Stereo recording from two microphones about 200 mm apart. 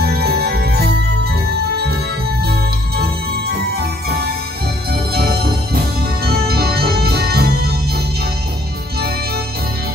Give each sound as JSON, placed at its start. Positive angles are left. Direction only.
{"t": 0.0, "sound": "music", "side_deg": -50}
{"t": 3.0, "sound": "organ", "side_deg": -50}
{"t": 5.1, "sound": "music", "side_deg": -50}